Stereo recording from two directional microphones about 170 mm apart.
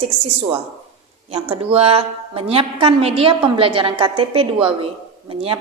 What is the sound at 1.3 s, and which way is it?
A woman's voice, 35° right (ahead or behind).